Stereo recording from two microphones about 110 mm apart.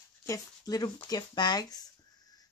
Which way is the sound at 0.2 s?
30° left (ahead or behind).